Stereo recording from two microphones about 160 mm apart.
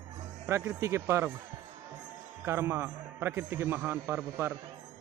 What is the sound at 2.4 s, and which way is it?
A man's voice, 15° right (ahead or behind).